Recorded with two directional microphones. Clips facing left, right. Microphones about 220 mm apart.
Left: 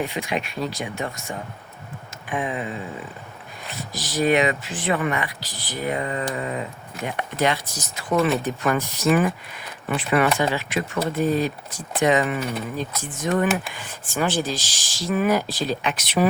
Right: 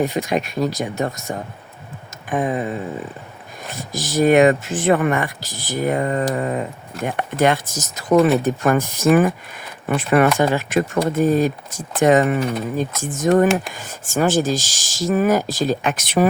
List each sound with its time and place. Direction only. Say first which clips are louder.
0.0 s speech: right 6 dB; 40° right (ahead or behind)